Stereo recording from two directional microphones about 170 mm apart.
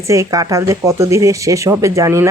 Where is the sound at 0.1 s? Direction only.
20° right (ahead or behind).